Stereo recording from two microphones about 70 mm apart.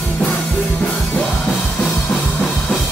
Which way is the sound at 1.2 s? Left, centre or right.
Centre.